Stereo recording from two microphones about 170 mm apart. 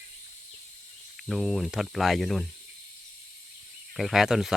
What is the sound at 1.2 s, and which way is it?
Speech, centre (ahead or behind).